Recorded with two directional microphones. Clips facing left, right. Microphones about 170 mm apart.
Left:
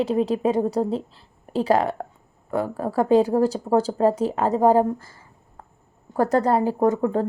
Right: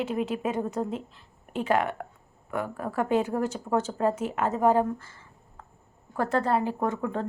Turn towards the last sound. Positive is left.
turn(degrees=40)  # may be behind; listen again after turning